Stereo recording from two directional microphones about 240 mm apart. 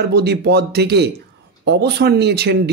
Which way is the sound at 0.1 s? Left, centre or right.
Right.